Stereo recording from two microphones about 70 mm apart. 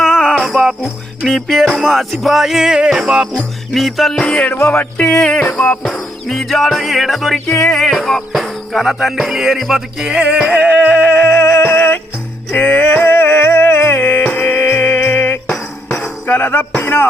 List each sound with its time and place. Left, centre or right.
0.0 s jingle bell: left
0.3 s jingle bell: centre
1.2 s music: centre
4.5 s music: left
4.8 s music: left
5.5 s music: left
5.8 s music: centre
11.2 s music: left